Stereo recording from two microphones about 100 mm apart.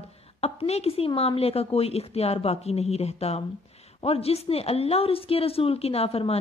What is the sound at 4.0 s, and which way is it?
Speech, 80° left.